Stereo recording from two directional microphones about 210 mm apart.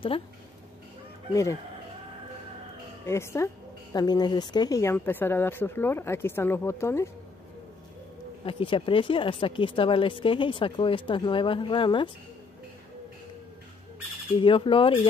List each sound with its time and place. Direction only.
1.3 s speech: 15° left (ahead or behind)
3.1 s speech: 15° left (ahead or behind)
8.5 s speech: 25° left (ahead or behind)
14.4 s speech: 25° left (ahead or behind)